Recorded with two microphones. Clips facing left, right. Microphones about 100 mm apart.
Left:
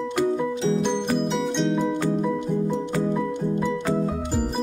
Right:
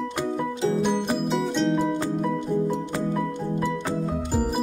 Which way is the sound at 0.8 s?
5° right (ahead or behind).